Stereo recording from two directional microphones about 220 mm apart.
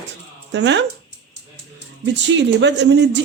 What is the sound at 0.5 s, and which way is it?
Speech, 55° right (ahead or behind).